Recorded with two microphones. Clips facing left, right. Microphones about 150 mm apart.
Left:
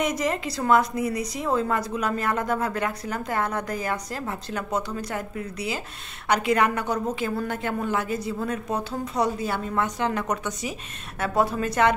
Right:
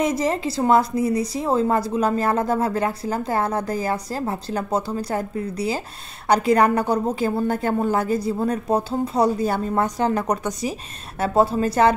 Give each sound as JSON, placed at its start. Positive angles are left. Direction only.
{"t": 0.0, "sound": "a woman's voice", "side_deg": -30}